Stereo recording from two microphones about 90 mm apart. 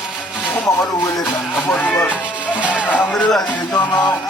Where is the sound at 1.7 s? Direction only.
20° left (ahead or behind).